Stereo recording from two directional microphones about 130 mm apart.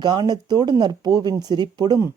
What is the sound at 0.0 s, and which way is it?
Speech, 30° right (ahead or behind).